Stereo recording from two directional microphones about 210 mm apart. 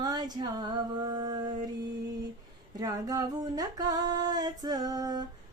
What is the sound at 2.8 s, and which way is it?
Music, 15° right (ahead or behind).